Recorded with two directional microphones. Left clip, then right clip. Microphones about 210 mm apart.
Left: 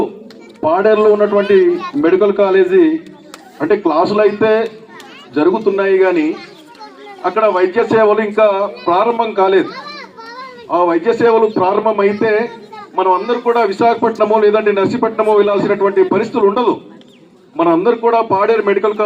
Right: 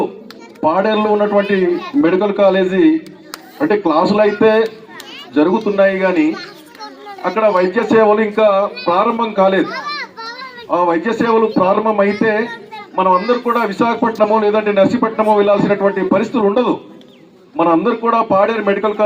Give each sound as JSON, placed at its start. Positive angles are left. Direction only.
{"t": 0.7, "sound": "a man's voice", "side_deg": -30}
{"t": 1.4, "sound": "speech", "side_deg": 15}
{"t": 2.0, "sound": "a man's voice", "side_deg": -30}